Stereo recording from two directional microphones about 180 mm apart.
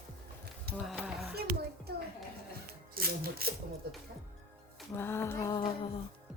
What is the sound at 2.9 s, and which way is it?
Speech, 55° right (ahead or behind).